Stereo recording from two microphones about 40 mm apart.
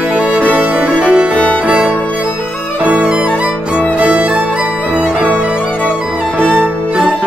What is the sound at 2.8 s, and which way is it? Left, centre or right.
Music, right.